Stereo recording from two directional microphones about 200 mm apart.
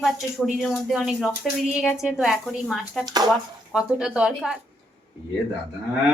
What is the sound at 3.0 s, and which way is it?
Speech, 20° right (ahead or behind).